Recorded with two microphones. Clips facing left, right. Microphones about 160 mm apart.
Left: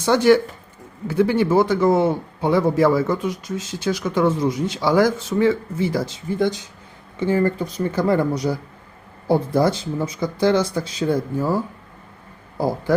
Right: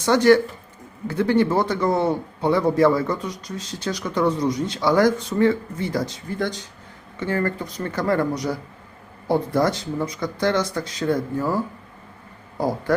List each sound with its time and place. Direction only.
0.0 s speech: 10° left (ahead or behind)
2.0 s a man's voice: 20° left (ahead or behind)
2.5 s speech: 5° left (ahead or behind)
7.2 s speech: 10° left (ahead or behind)